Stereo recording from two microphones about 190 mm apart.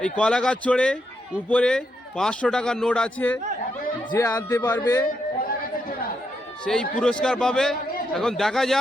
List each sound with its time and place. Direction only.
0.0 s a man's voice: 5° left (ahead or behind)
4.1 s a man's voice: 15° left (ahead or behind)
6.7 s a man's voice: 5° left (ahead or behind)